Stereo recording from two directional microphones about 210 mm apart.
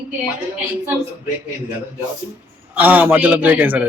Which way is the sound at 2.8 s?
10° right (ahead or behind).